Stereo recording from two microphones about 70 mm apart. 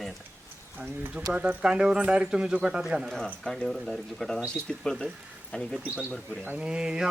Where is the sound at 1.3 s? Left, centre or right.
Centre.